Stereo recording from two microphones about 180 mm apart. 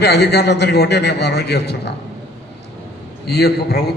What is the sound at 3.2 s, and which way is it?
Speech, 65° left (ahead or behind).